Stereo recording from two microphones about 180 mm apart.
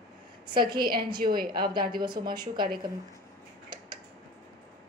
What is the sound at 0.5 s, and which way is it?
A woman's voice, 25° right (ahead or behind).